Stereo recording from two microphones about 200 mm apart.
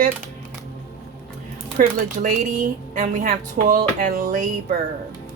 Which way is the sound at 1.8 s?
40° right (ahead or behind).